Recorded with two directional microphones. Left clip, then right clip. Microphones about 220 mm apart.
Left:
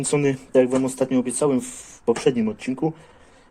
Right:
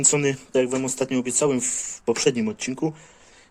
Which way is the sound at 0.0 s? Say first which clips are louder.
Even; 20° right (ahead or behind).